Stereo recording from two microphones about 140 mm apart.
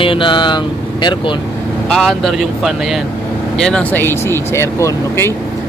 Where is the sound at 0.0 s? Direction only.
40° left (ahead or behind).